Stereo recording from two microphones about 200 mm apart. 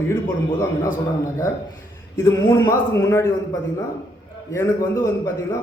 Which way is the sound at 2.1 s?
15° left (ahead or behind).